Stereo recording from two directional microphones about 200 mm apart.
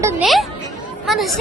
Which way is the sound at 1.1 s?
Centre (ahead or behind).